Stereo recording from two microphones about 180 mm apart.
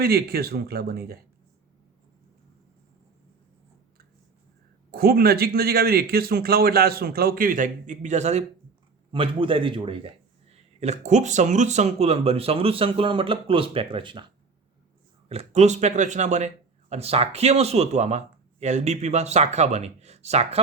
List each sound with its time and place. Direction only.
0.0 s speech: 60° right (ahead or behind)
4.9 s a man's voice: 60° right (ahead or behind); by 14.3 s 25° right (ahead or behind)
15.3 s speech: 35° right (ahead or behind)